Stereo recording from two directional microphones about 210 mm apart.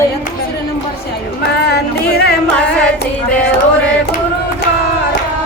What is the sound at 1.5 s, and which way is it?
Music, 50° left (ahead or behind).